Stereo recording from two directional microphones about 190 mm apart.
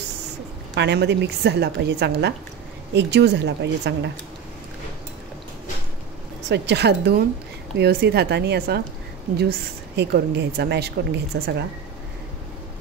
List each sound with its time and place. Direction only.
0.7 s a woman's voice: 65° right (ahead or behind)
6.5 s a woman's voice: 65° right (ahead or behind)